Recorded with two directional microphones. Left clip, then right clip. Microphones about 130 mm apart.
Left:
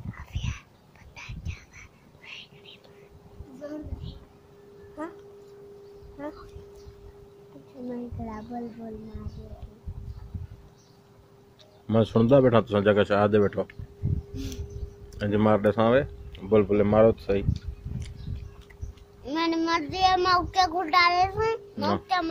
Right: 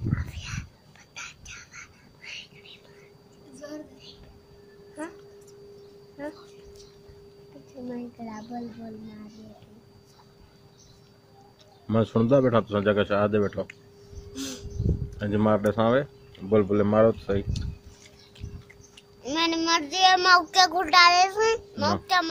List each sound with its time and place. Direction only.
0.1 s whispering: centre (ahead or behind)
1.5 s a sound: centre (ahead or behind)
7.9 s a sound: 5° left (ahead or behind)
11.9 s a man's voice: 20° left (ahead or behind); by 13.7 s 40° left (ahead or behind)
15.0 s speech: 30° left (ahead or behind)
19.2 s child singing: 10° right (ahead or behind)
22.0 s a child's voice: 15° right (ahead or behind)